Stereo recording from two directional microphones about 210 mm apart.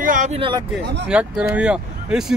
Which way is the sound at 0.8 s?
55° right (ahead or behind).